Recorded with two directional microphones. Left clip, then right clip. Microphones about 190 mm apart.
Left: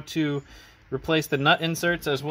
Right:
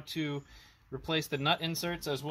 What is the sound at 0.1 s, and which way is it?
Speech, 20° left (ahead or behind).